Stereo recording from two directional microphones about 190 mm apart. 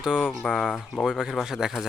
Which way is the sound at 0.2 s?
10° left (ahead or behind).